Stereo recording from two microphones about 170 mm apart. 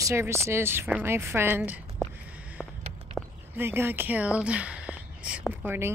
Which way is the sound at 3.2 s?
Centre (ahead or behind).